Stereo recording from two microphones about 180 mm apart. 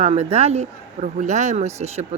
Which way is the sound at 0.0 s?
35° right (ahead or behind).